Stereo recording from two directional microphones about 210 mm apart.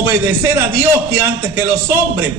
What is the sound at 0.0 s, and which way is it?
A man's voice, 10° right (ahead or behind).